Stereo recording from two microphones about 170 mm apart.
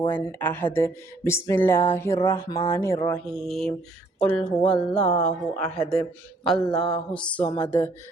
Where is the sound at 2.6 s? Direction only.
15° left (ahead or behind).